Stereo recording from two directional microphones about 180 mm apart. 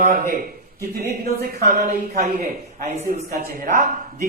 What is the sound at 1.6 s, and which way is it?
A man's voice, 50° right (ahead or behind).